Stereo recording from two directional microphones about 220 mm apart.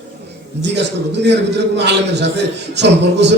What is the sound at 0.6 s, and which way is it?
A man's voice, 50° right (ahead or behind).